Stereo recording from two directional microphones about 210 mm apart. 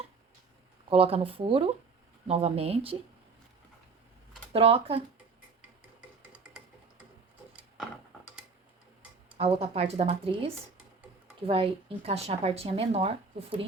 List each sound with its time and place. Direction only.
0.9 s speech: 30° right (ahead or behind)
4.5 s speech: 25° right (ahead or behind)
9.4 s speech: 30° right (ahead or behind)